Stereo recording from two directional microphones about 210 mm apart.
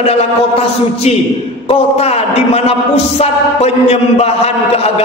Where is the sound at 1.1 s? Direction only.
30° left (ahead or behind).